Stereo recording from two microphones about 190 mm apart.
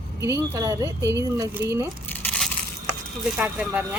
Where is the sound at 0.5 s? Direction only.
15° right (ahead or behind).